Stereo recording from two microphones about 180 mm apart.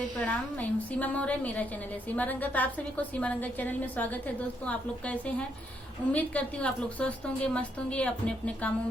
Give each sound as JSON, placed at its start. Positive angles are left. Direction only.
{"t": 0.2, "sound": "a woman's voice", "side_deg": 5}